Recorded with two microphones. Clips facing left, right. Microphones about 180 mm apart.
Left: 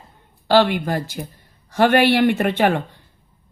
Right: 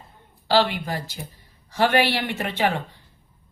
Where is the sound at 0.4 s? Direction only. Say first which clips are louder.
Left 5 dB; 55° left (ahead or behind).